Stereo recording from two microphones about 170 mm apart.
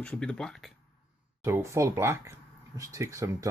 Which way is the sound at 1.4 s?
15° right (ahead or behind).